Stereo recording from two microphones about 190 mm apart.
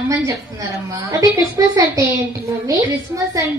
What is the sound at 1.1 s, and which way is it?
A woman's voice, 15° right (ahead or behind).